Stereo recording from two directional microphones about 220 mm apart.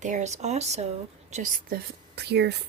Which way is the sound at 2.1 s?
50° right (ahead or behind).